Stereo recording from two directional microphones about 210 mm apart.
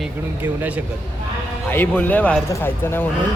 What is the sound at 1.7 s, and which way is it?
Speech, 10° left (ahead or behind).